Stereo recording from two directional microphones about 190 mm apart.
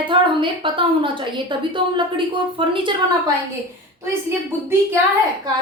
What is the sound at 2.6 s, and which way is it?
Speech, 25° right (ahead or behind).